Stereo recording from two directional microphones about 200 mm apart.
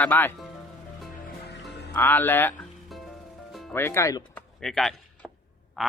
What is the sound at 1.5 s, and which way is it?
Music, 55° left (ahead or behind).